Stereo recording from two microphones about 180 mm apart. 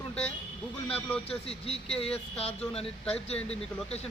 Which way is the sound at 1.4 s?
35° left (ahead or behind).